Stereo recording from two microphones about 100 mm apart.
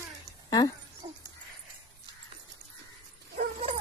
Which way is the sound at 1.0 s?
60° right (ahead or behind).